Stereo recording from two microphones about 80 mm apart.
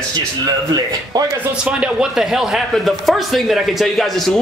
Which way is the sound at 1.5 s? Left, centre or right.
Centre.